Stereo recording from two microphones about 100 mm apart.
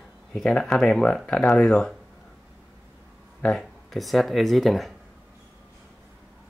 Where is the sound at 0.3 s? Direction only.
5° left (ahead or behind).